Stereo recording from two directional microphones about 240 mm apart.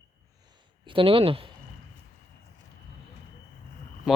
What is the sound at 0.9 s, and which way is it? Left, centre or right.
Speech, right.